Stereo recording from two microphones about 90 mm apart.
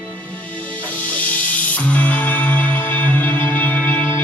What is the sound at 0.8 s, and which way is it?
Music, 15° left (ahead or behind).